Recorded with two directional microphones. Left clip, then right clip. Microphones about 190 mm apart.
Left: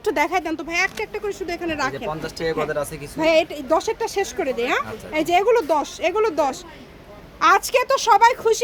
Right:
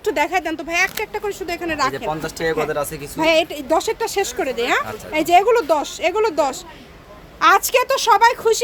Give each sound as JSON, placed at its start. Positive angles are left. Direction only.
{"t": 0.0, "sound": "a woman's voice", "side_deg": 10}
{"t": 2.0, "sound": "speech", "side_deg": -25}
{"t": 3.2, "sound": "a woman's voice", "side_deg": 0}